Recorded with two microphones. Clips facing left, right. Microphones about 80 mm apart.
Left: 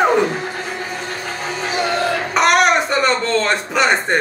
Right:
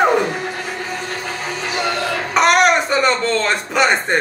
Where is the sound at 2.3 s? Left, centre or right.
Centre.